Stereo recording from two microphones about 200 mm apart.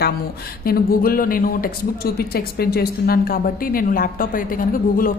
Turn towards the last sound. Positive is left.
turn(degrees=45)  # may be behind; listen again after turning